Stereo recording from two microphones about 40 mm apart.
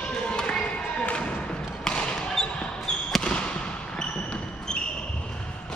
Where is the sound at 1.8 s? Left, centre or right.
Left.